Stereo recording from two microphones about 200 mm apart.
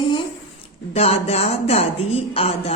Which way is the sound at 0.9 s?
30° left (ahead or behind).